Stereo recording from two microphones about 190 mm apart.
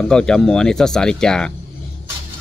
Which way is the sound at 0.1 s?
5° left (ahead or behind).